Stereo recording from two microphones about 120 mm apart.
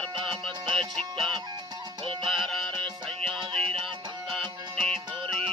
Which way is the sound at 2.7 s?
15° left (ahead or behind).